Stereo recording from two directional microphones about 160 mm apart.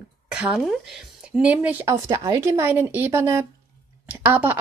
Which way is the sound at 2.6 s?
15° right (ahead or behind).